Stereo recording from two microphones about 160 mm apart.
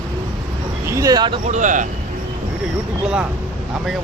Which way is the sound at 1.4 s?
50° right (ahead or behind).